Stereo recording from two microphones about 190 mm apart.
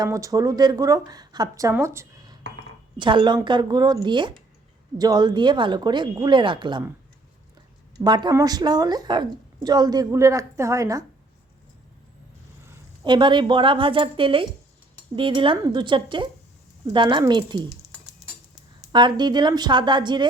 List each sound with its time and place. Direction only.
0.0 s a woman's voice: 15° right (ahead or behind)
8.0 s a woman's voice: 25° right (ahead or behind)
13.1 s a woman's voice: 25° right (ahead or behind)
18.9 s a woman's voice: 25° right (ahead or behind)